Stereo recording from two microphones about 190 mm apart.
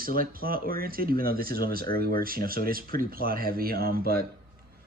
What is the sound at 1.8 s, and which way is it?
Speech, 25° left (ahead or behind).